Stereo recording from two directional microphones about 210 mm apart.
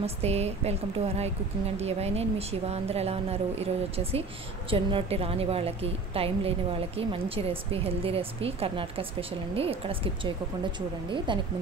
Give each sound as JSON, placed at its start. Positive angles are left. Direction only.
{"t": 0.0, "sound": "a woman's voice", "side_deg": -30}